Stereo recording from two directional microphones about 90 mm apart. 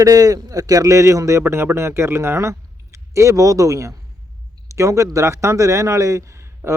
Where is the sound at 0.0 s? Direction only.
40° right (ahead or behind).